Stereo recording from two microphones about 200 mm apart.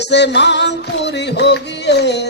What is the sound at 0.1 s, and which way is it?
Music, 60° left (ahead or behind).